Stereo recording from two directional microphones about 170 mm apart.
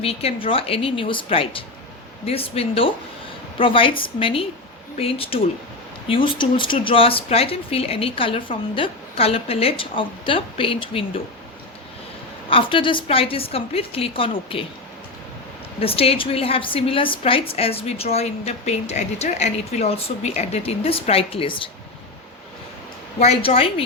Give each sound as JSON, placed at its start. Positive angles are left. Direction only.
{"t": 0.0, "sound": "a woman's voice", "side_deg": 35}
{"t": 12.5, "sound": "a woman's voice", "side_deg": 30}
{"t": 15.8, "sound": "a woman's voice", "side_deg": 35}
{"t": 23.2, "sound": "a woman's voice", "side_deg": 35}